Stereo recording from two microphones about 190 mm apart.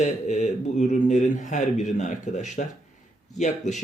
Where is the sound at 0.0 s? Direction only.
40° left (ahead or behind).